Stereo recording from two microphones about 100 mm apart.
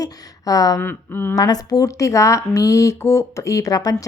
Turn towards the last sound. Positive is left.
turn(degrees=35)  # may be behind; listen again after turning